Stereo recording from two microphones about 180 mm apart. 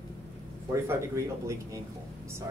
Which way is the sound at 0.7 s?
15° right (ahead or behind).